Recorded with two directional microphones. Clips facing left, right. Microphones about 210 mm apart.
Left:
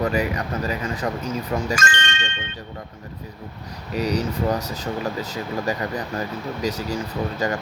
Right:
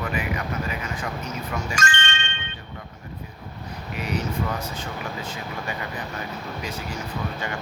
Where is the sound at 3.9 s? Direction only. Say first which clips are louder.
Left 5 dB; 40° left (ahead or behind).